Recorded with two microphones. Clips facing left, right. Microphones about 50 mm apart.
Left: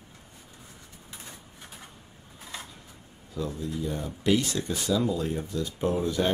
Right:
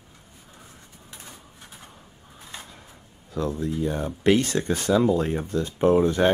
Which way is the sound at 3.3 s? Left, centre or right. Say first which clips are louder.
Right 6 dB; right.